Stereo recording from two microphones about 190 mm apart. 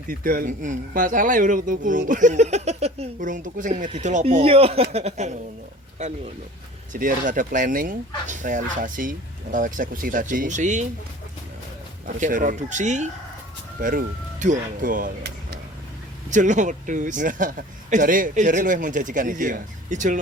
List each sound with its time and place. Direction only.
0.1 s speech: 50° right (ahead or behind)
12.0 s speech: 45° right (ahead or behind)
16.3 s speech: 40° right (ahead or behind)